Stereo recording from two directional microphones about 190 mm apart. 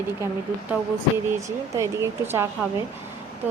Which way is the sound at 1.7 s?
15° right (ahead or behind).